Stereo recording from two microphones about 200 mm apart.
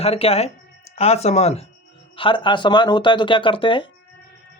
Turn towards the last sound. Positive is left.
turn(degrees=25)  # may be behind; listen again after turning